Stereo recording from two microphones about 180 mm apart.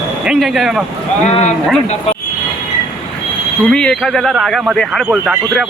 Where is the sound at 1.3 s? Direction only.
40° left (ahead or behind).